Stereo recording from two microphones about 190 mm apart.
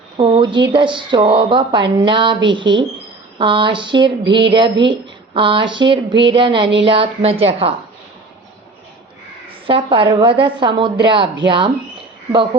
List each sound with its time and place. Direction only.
0.2 s speech: 25° right (ahead or behind)
9.6 s speech: 25° right (ahead or behind)